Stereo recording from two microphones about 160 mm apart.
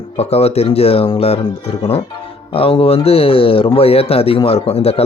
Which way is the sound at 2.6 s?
35° left (ahead or behind).